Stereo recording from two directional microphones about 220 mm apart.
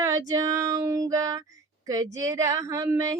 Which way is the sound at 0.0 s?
15° right (ahead or behind).